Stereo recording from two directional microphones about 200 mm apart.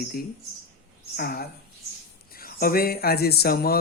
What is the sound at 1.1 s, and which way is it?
Speech, 50° left (ahead or behind).